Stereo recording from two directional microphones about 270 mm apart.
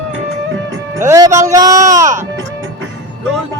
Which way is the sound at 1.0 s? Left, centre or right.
Centre.